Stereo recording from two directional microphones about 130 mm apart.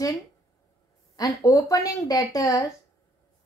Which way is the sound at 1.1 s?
25° left (ahead or behind).